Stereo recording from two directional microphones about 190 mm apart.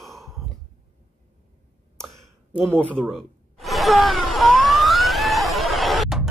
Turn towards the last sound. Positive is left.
turn(degrees=0)  # may be behind; listen again after turning